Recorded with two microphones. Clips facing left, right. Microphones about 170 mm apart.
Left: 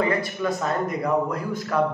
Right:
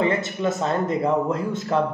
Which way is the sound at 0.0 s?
25° right (ahead or behind).